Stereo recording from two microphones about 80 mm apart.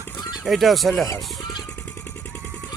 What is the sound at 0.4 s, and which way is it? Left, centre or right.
Speech, centre.